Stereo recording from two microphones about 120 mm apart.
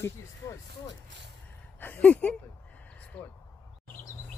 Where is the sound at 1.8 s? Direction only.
15° left (ahead or behind).